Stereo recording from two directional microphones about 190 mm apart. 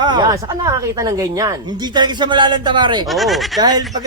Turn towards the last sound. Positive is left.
turn(degrees=-20)  # may be behind; listen again after turning